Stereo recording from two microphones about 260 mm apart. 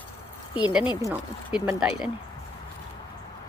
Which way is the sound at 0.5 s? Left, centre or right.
Centre.